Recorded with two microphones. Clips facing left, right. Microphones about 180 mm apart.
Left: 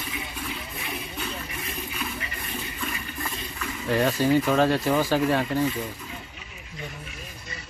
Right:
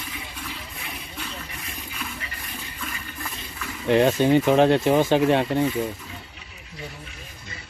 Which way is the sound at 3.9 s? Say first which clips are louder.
Right 4 dB; 20° right (ahead or behind).